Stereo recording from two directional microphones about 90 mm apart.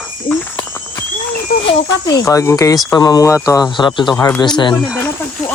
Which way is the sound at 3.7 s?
60° left (ahead or behind).